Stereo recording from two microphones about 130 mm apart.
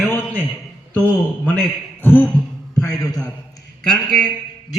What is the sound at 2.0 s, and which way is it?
Speech, 15° left (ahead or behind).